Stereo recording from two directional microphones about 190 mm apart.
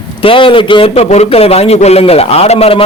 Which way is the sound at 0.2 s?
30° left (ahead or behind).